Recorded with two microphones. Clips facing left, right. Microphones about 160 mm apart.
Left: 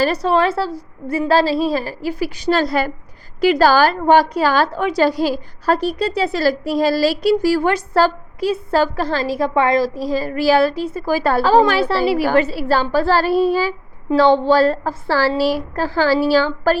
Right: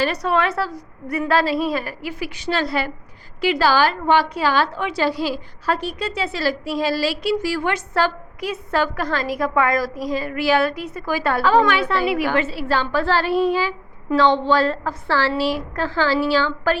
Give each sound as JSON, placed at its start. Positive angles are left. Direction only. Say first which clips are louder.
{"t": 0.0, "sound": "a woman's voice", "louder": "left 4 dB", "side_deg": 30}